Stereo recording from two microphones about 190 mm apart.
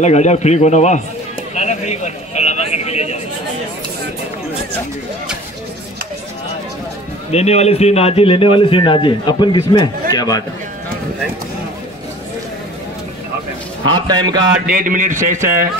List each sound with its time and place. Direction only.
0.0 s speech: 35° left (ahead or behind)
7.2 s a man's voice: 35° left (ahead or behind)
13.9 s speech: 25° right (ahead or behind)
14.7 s a man's voice: 45° right (ahead or behind)